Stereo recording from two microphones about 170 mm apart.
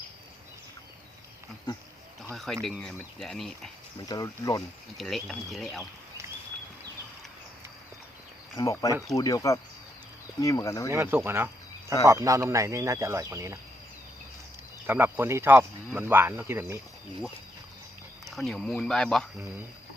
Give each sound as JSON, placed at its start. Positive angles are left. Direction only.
{"t": 2.3, "sound": "speech", "side_deg": 0}
{"t": 4.0, "sound": "speech", "side_deg": 20}
{"t": 4.9, "sound": "speech", "side_deg": 0}
{"t": 8.5, "sound": "speech", "side_deg": 20}
{"t": 10.9, "sound": "speech", "side_deg": -15}
{"t": 14.8, "sound": "speech", "side_deg": -10}
{"t": 18.3, "sound": "speech", "side_deg": 0}